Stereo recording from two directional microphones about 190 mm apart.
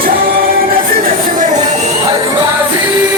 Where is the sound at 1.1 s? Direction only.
40° right (ahead or behind).